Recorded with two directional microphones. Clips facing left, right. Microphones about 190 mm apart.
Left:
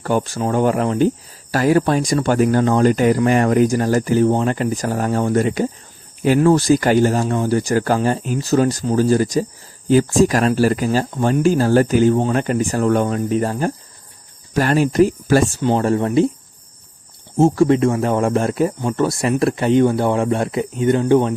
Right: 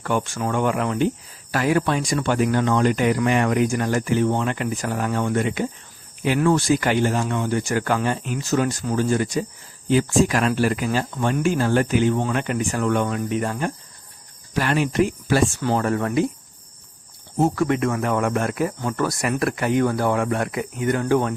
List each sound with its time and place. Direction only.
0.0 s speech: 35° left (ahead or behind)
15.6 s speech: 25° left (ahead or behind)
17.3 s speech: 30° left (ahead or behind)